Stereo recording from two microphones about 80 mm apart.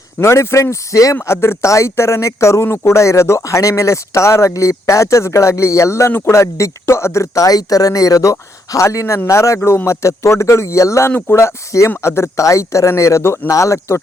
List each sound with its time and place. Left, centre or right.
0.2 s speech: left